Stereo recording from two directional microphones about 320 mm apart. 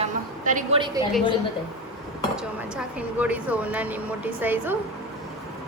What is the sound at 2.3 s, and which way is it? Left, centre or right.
Speech, centre.